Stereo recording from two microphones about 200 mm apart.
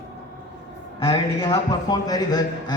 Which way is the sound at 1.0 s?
25° left (ahead or behind).